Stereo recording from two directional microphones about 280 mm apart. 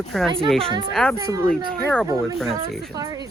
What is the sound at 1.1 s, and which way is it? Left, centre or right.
Speech, centre.